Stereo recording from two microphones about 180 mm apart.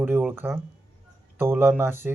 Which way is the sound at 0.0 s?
10° right (ahead or behind).